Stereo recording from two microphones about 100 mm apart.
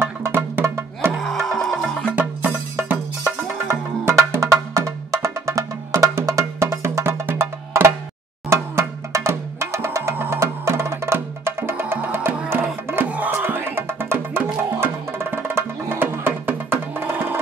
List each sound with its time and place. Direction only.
0.0 s music: 25° right (ahead or behind)
1.1 s music: centre (ahead or behind)
2.1 s music: 20° right (ahead or behind)